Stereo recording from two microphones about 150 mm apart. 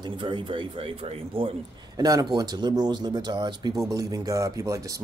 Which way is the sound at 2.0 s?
25° right (ahead or behind).